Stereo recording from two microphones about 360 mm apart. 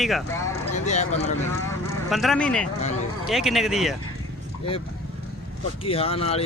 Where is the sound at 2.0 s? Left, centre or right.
Centre.